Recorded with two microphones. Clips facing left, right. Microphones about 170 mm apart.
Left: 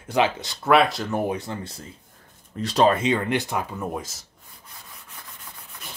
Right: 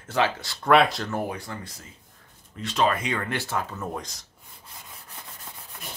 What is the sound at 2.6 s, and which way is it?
Speech, 35° left (ahead or behind).